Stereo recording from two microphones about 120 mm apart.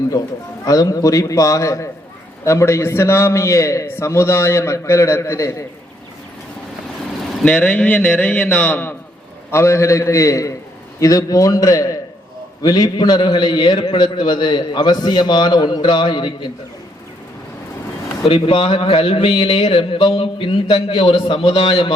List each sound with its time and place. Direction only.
0.1 s a man's voice: 35° left (ahead or behind)
7.4 s a man's voice: 10° left (ahead or behind); by 16.5 s 40° left (ahead or behind)
18.3 s speech: 45° left (ahead or behind)